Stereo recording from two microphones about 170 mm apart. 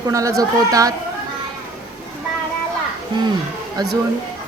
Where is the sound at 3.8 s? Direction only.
25° right (ahead or behind).